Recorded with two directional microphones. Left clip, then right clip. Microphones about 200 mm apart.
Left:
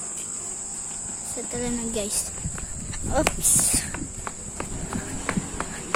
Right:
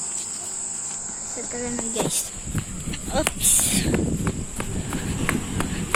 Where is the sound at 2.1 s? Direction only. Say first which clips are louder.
Right 2 dB; 10° left (ahead or behind).